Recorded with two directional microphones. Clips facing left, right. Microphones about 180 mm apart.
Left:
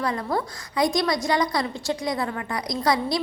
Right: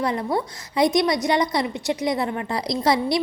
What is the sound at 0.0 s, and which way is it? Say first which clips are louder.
A woman's voice: right 2 dB; 20° right (ahead or behind).